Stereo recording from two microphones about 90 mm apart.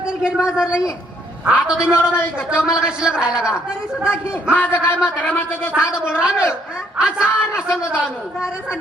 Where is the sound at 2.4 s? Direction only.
10° right (ahead or behind).